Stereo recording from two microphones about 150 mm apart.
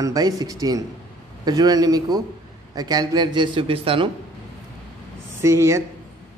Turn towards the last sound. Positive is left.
turn(degrees=-20)  # may be behind; listen again after turning